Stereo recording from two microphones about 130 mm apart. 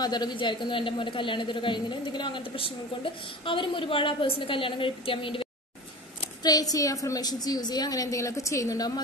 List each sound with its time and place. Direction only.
0.0 s a woman's voice: 35° left (ahead or behind)
6.4 s a woman's voice: 30° left (ahead or behind)